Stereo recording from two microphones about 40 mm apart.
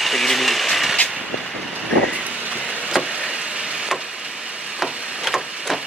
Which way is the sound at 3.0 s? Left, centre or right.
Right.